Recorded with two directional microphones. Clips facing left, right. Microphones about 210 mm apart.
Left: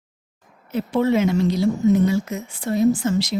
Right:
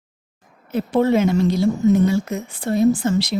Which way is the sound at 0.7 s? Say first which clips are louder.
Right 2 dB; 50° right (ahead or behind).